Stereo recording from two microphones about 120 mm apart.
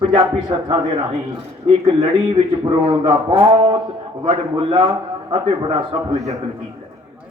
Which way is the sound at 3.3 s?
50° right (ahead or behind).